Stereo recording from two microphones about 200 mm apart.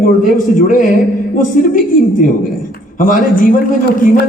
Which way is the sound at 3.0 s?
45° left (ahead or behind).